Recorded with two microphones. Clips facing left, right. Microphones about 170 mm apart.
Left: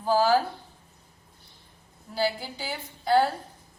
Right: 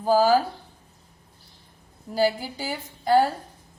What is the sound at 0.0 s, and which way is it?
Speech, 45° right (ahead or behind).